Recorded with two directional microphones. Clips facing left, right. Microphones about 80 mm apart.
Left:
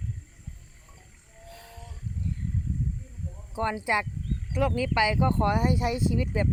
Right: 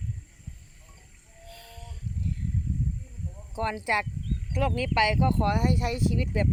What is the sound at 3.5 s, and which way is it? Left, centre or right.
Speech, left.